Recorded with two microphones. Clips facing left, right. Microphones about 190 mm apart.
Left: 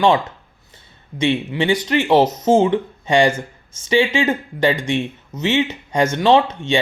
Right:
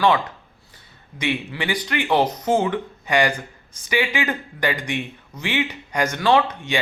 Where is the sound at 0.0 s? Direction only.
25° left (ahead or behind).